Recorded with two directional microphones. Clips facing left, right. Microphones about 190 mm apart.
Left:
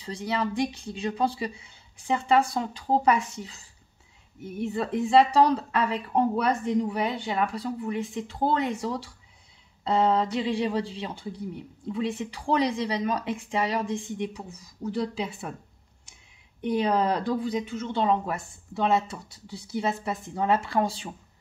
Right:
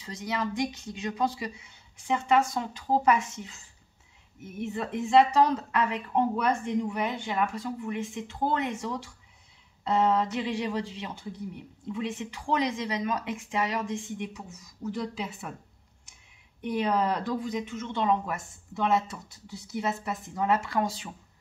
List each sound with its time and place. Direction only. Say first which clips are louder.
0.0 s speech: left 3 dB; 30° left (ahead or behind)
16.6 s speech: left 3 dB; 30° left (ahead or behind)